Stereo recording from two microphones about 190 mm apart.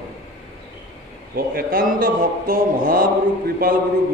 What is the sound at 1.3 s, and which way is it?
A man's voice, 50° right (ahead or behind).